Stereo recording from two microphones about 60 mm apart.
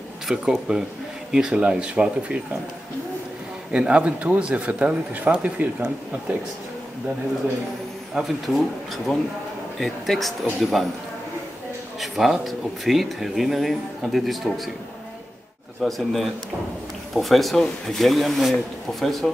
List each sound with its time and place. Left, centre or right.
0.3 s speech: centre
3.7 s speech: centre
8.1 s speech: centre
12.0 s speech: centre
15.8 s speech: centre